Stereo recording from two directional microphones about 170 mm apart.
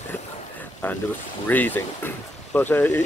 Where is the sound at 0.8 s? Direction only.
10° left (ahead or behind).